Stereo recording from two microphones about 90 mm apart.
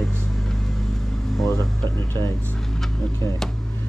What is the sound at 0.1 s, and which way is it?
Vehicle, 5° left (ahead or behind).